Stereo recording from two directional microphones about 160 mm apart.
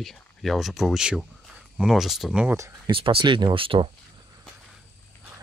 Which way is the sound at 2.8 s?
35° right (ahead or behind).